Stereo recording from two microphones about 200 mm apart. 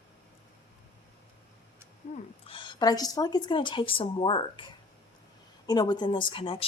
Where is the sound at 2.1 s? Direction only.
25° left (ahead or behind).